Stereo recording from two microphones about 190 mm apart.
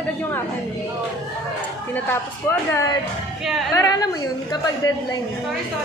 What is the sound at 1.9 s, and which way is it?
A woman's voice, 10° left (ahead or behind).